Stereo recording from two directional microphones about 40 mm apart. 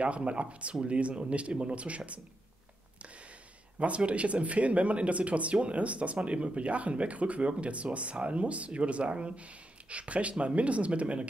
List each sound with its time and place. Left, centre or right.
0.0 s speech: right
3.8 s speech: right